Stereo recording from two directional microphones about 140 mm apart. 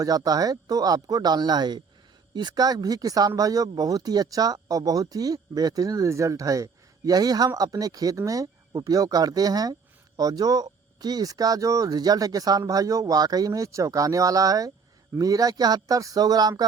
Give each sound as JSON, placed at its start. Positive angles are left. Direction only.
{"t": 0.0, "sound": "speech", "side_deg": -25}